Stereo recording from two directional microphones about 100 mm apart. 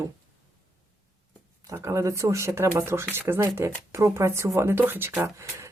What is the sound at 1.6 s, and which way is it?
A woman's voice, 30° right (ahead or behind).